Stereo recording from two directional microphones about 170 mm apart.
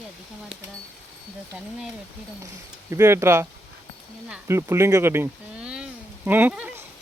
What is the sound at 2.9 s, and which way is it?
Speech, 15° right (ahead or behind).